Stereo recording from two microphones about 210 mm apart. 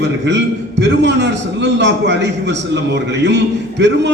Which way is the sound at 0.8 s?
55° right (ahead or behind).